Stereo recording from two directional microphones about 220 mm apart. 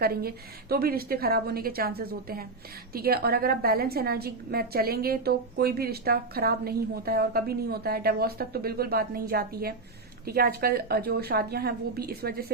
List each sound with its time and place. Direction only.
0.0 s a woman's voice: 45° right (ahead or behind)